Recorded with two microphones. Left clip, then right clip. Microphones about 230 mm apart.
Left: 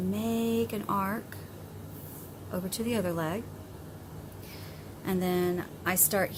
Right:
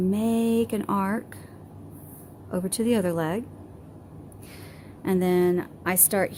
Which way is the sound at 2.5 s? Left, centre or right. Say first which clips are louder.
Right 8 dB; right.